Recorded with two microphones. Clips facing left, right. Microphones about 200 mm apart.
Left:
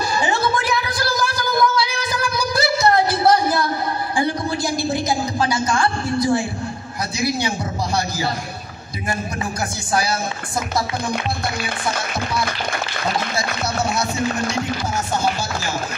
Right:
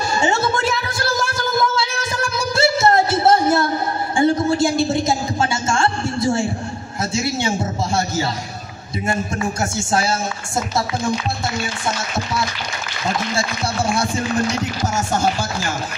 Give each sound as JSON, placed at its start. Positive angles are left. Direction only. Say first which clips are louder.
{"t": 0.2, "sound": "music", "louder": "right 3 dB", "side_deg": -25}
{"t": 4.2, "sound": "a woman's voice", "louder": "right 7 dB", "side_deg": -25}